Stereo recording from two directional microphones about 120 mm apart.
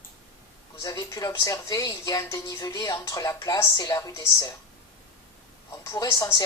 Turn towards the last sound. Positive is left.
turn(degrees=30)  # may be behind; listen again after turning